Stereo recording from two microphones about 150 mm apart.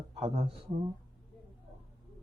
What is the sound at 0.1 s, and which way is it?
Speech, 40° right (ahead or behind).